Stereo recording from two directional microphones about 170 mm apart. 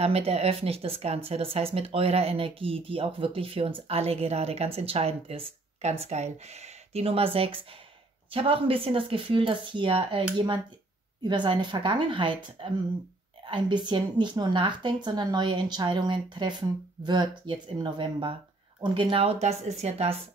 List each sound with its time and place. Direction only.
0.0 s a woman's voice: 35° right (ahead or behind)